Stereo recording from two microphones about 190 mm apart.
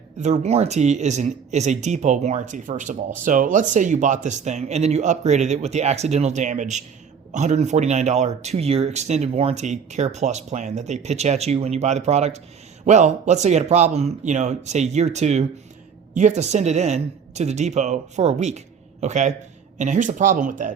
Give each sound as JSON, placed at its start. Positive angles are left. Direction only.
{"t": 0.2, "sound": "speech", "side_deg": -40}